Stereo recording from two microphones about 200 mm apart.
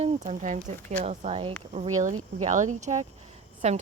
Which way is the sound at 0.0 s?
35° right (ahead or behind).